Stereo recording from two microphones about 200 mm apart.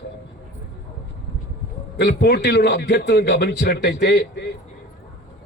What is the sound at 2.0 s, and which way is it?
A man's voice, 55° left (ahead or behind).